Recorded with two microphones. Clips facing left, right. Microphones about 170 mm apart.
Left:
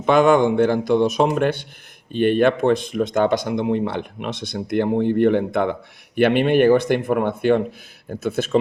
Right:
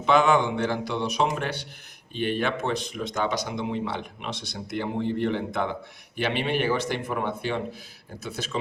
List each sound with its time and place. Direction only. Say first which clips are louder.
0.0 s speech: left 6 dB; 50° left (ahead or behind)